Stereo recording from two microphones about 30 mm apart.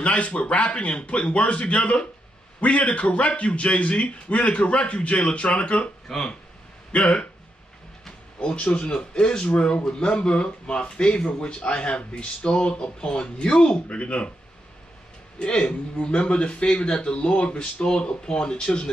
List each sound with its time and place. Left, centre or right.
0.0 s a man's voice: left
6.1 s speech: centre
6.9 s speech: left
8.4 s speech: left
15.3 s a man's voice: left